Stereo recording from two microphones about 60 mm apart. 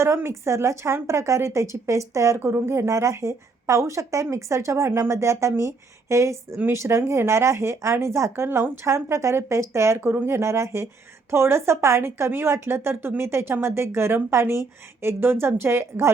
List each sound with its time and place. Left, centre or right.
0.0 s speech: right
2.4 s a woman's voice: right
8.4 s a woman's voice: right